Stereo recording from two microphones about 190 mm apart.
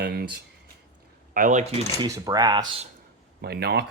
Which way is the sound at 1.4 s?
45° right (ahead or behind).